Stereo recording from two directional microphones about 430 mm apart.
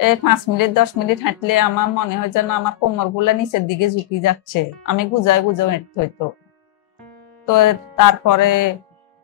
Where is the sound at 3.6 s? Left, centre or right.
Left.